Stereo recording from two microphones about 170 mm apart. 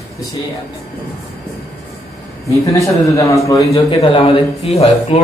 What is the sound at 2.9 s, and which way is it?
Speech, 20° left (ahead or behind).